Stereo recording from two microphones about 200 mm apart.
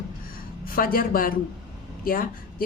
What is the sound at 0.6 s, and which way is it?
A woman's voice, 45° left (ahead or behind).